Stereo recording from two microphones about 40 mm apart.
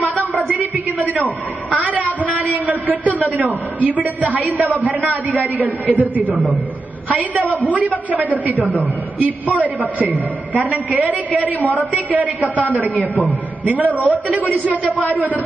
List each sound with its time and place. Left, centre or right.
0.5 s a sound: right
3.3 s a woman's voice: right
11.6 s a woman's voice: left
11.9 s a woman's voice: right